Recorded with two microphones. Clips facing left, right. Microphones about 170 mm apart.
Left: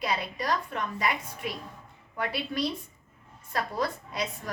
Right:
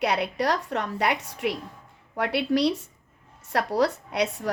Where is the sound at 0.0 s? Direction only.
70° right (ahead or behind).